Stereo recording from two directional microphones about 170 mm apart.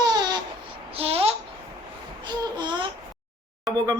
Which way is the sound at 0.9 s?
35° right (ahead or behind).